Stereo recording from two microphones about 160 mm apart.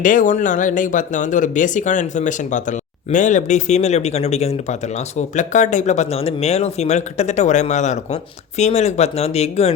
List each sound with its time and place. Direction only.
0.0 s speech: 55° left (ahead or behind)